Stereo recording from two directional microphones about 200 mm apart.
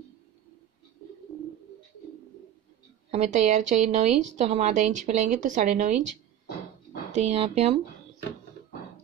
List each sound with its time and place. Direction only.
3.1 s a woman's voice: 35° right (ahead or behind)
7.1 s a woman's voice: 35° right (ahead or behind)